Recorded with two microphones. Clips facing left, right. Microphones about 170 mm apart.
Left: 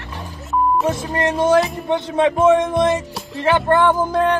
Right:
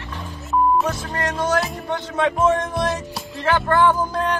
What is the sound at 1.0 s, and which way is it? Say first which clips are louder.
Speech: left 6 dB; 25° left (ahead or behind).